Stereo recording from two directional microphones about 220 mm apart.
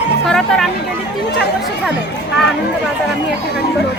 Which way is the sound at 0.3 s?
Centre (ahead or behind).